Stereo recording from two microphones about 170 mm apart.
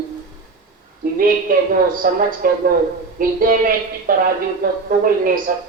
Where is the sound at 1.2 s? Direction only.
55° right (ahead or behind).